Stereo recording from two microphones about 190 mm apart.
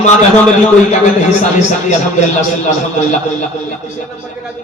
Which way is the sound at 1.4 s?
40° left (ahead or behind).